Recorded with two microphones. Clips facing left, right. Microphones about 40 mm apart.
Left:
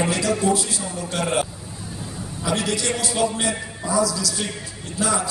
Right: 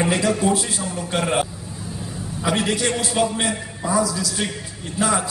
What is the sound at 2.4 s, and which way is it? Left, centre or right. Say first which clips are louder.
A man's voice: right 2 dB; right.